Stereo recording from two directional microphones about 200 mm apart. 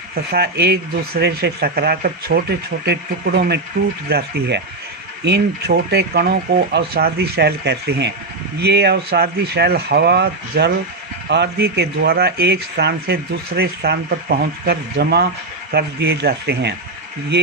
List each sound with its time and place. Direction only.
0.3 s speech: 55° right (ahead or behind)